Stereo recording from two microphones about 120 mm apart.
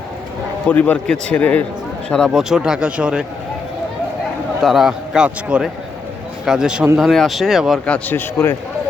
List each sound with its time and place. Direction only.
0.7 s a man's voice: 10° left (ahead or behind); by 3.2 s 10° right (ahead or behind)
4.6 s a man's voice: centre (ahead or behind)
7.9 s a man's voice: 10° left (ahead or behind)